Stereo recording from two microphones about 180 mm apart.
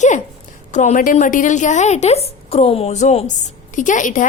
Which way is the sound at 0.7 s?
45° left (ahead or behind).